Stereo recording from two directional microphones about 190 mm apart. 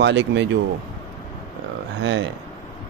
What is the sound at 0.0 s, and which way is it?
Speech, 70° right (ahead or behind).